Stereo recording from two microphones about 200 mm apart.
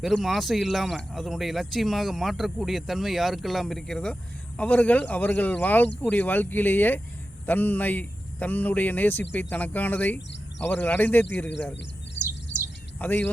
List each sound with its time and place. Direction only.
0.0 s speech: centre (ahead or behind)
12.2 s bird: 60° left (ahead or behind)
13.0 s speech: 10° left (ahead or behind)